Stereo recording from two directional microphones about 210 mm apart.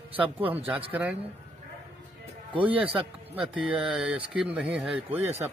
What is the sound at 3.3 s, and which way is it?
Speech, 5° right (ahead or behind).